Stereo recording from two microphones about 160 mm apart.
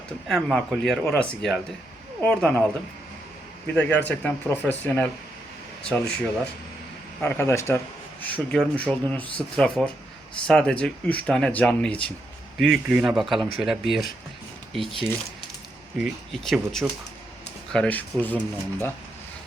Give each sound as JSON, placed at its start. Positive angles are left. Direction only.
{"t": 0.3, "sound": "speech", "side_deg": 0}
{"t": 3.8, "sound": "speech", "side_deg": 10}